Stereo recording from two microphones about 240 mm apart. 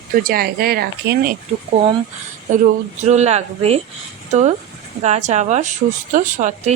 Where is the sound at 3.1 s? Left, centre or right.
Right.